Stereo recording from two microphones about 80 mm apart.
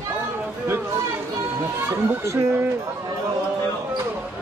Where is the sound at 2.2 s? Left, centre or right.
Right.